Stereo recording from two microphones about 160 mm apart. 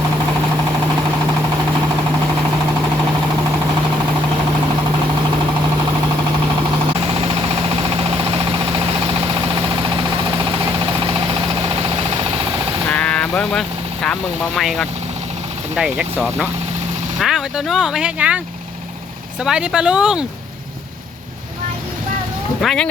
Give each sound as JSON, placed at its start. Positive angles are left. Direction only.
{"t": 7.0, "sound": "vehicle", "side_deg": -35}
{"t": 12.9, "sound": "vehicle", "side_deg": 5}
{"t": 15.7, "sound": "speech", "side_deg": -5}
{"t": 22.6, "sound": "speech", "side_deg": 5}